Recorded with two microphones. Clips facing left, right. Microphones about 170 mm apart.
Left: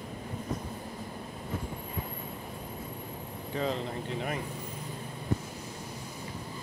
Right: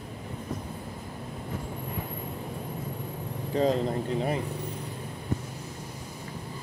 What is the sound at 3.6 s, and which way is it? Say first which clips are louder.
Speech: right 7 dB; 40° right (ahead or behind).